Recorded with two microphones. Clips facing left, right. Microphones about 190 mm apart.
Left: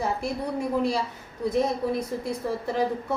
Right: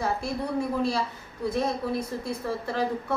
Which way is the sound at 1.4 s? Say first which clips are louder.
Left 3 dB; 20° left (ahead or behind).